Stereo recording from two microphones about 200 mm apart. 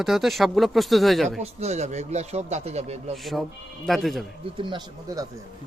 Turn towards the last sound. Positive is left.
turn(degrees=-20)  # may be behind; listen again after turning